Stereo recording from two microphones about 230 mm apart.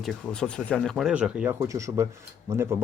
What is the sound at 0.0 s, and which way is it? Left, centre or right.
Speech, centre.